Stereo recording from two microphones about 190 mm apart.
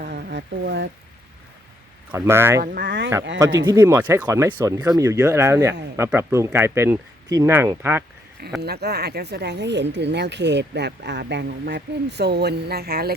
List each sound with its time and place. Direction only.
0.0 s a sound: 55° right (ahead or behind)
2.1 s speech: 15° right (ahead or behind)
2.6 s speech: 50° right (ahead or behind)
3.3 s speech: 20° right (ahead or behind)
8.6 s speech: 60° right (ahead or behind)